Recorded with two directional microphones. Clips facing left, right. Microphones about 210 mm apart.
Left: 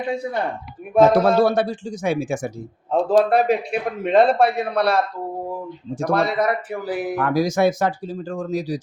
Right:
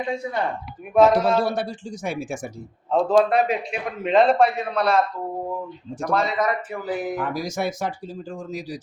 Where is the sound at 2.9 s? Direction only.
35° left (ahead or behind).